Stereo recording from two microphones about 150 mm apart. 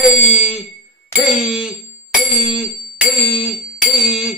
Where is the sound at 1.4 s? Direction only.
Centre (ahead or behind).